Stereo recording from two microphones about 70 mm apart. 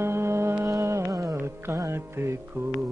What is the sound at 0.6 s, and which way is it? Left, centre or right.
Music, right.